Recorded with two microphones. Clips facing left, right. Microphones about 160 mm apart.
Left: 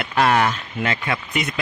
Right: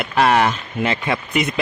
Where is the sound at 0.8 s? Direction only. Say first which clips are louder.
Right 3 dB; 30° right (ahead or behind).